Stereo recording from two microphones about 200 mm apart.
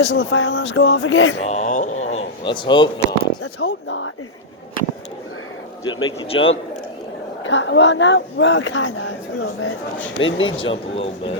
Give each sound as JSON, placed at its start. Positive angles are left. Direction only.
{"t": 0.0, "sound": "speech", "side_deg": 65}
{"t": 1.5, "sound": "speech", "side_deg": 35}
{"t": 3.4, "sound": "speech", "side_deg": 70}
{"t": 5.8, "sound": "speech", "side_deg": 90}
{"t": 6.1, "sound": "a man's voice", "side_deg": 30}
{"t": 7.4, "sound": "a woman's voice", "side_deg": 65}
{"t": 10.2, "sound": "speech", "side_deg": 75}
{"t": 10.9, "sound": "a man's voice", "side_deg": 30}